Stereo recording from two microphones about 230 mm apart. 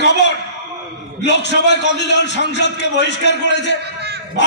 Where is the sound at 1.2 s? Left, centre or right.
Left.